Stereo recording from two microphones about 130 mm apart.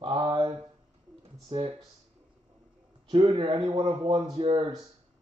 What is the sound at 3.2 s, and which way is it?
Speech, 30° right (ahead or behind).